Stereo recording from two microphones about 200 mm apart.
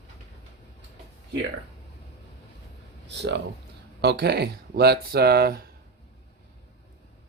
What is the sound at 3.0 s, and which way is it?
Speech, 60° right (ahead or behind).